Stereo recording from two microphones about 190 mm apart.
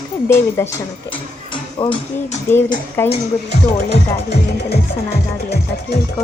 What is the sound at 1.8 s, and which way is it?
Speech, 30° left (ahead or behind).